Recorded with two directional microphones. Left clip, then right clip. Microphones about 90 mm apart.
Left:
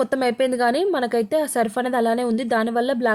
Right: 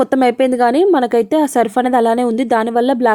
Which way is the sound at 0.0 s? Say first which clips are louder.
Right 7 dB; 45° right (ahead or behind).